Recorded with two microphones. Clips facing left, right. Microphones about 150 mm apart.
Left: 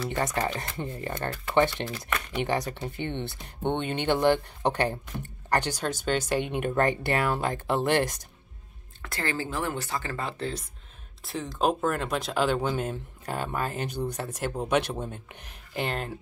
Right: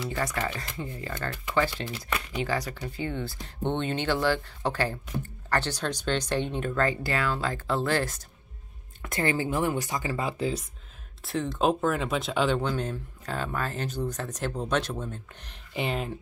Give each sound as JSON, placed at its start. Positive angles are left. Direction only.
{"t": 0.1, "sound": "speech", "side_deg": 25}
{"t": 3.6, "sound": "speech", "side_deg": 15}
{"t": 7.1, "sound": "speech", "side_deg": 25}
{"t": 9.0, "sound": "speech", "side_deg": -20}
{"t": 11.2, "sound": "speech", "side_deg": 0}
{"t": 15.7, "sound": "speech", "side_deg": 0}